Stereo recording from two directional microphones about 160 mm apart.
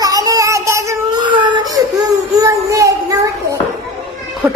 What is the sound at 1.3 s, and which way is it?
Baby cry, 30° right (ahead or behind).